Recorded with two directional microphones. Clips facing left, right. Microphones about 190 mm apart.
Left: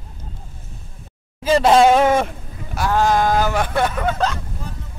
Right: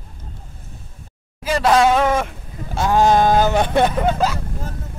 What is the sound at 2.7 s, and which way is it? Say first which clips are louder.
Speech: right 3 dB; 20° right (ahead or behind).